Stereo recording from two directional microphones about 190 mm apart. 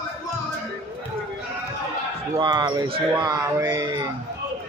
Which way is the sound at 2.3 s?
20° right (ahead or behind).